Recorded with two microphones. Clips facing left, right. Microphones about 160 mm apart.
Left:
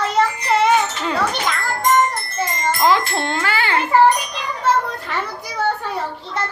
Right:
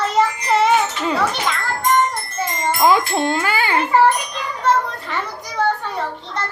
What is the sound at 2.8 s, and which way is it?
Speech, 15° right (ahead or behind).